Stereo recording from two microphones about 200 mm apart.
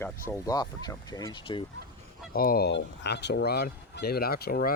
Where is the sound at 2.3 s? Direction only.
50° left (ahead or behind).